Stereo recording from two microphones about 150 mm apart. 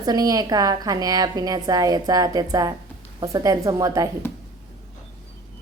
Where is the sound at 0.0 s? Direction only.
25° right (ahead or behind).